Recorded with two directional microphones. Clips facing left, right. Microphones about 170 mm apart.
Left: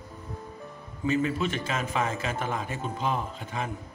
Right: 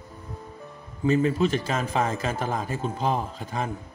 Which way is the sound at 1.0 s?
35° right (ahead or behind).